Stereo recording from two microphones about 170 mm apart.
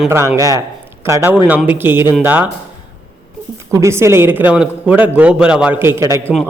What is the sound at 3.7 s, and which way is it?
Speech, 15° right (ahead or behind).